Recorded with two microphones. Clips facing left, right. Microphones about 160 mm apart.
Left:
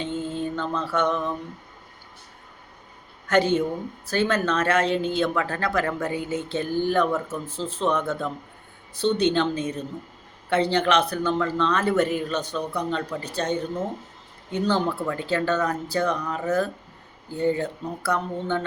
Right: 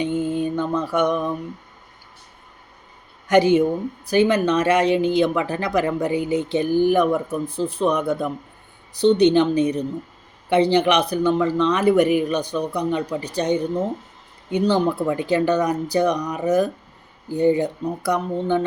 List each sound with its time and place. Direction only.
0.0 s mantra: 15° right (ahead or behind)
3.2 s speech: 10° right (ahead or behind)